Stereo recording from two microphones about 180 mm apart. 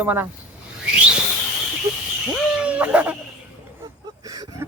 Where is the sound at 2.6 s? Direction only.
5° right (ahead or behind).